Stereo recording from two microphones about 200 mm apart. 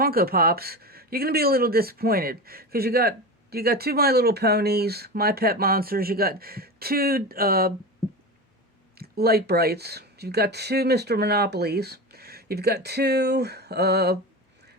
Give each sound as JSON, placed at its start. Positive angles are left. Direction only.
{"t": 0.0, "sound": "speech", "side_deg": -50}
{"t": 9.0, "sound": "speech", "side_deg": -50}